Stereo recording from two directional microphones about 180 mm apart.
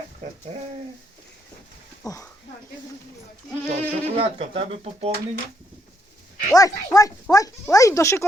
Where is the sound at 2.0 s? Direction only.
20° left (ahead or behind).